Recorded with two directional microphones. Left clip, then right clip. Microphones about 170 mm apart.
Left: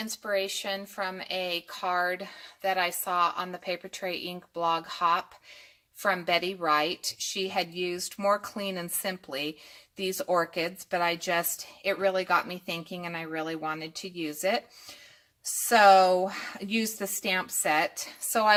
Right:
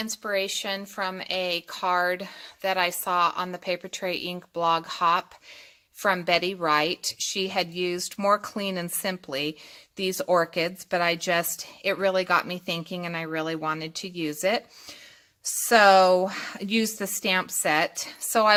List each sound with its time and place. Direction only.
0.1 s speech: 30° right (ahead or behind)